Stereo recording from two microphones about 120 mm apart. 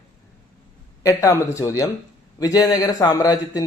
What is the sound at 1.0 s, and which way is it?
A man's voice, 25° left (ahead or behind).